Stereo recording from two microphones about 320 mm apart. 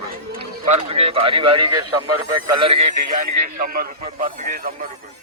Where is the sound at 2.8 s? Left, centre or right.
Right.